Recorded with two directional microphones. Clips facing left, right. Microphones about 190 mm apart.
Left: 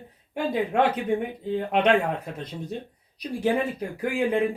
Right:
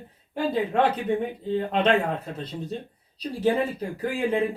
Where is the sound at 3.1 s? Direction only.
15° left (ahead or behind).